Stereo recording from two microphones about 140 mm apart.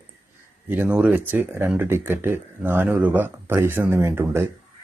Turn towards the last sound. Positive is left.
turn(degrees=-15)  # may be behind; listen again after turning